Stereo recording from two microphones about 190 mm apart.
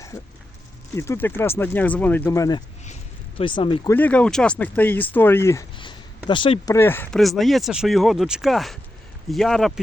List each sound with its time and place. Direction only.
0.1 s speech: 15° left (ahead or behind)
2.8 s a sound: 40° left (ahead or behind)
3.4 s speech: 25° left (ahead or behind)
3.9 s speech: 10° left (ahead or behind)
5.7 s a sound: 25° left (ahead or behind)
6.7 s speech: 10° left (ahead or behind)
7.2 s speech: centre (ahead or behind)